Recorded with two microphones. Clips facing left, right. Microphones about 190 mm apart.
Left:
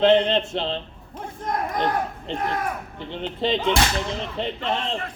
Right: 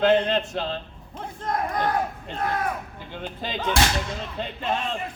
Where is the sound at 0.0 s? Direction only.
25° left (ahead or behind).